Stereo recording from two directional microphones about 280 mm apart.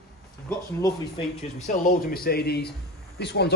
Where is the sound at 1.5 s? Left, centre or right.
Left.